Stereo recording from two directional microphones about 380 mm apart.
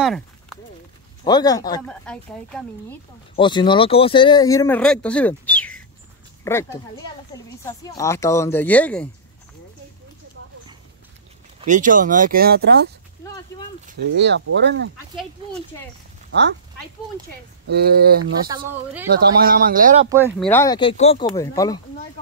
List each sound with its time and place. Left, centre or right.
0.0 s a sound: centre
1.2 s speech: centre
11.6 s speech: centre
13.8 s speech: right
17.6 s speech: right
19.4 s speech: right
20.1 s speech: centre
20.4 s speech: centre